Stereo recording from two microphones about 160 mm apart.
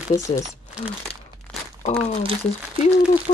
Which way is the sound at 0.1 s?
20° left (ahead or behind).